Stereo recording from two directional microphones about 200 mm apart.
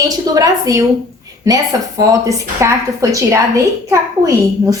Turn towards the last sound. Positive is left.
turn(degrees=-15)  # may be behind; listen again after turning